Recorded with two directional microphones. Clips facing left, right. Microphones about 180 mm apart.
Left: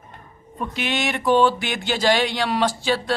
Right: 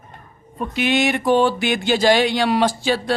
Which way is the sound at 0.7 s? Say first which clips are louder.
Right 7 dB; 10° right (ahead or behind).